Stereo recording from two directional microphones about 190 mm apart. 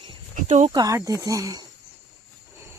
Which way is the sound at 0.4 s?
40° right (ahead or behind).